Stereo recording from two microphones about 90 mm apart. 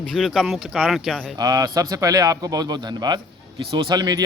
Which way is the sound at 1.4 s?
45° right (ahead or behind).